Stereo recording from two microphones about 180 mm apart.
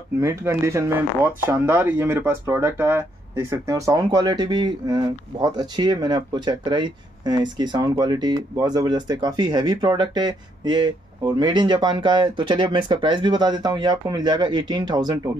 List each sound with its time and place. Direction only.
0.2 s speech: 15° right (ahead or behind)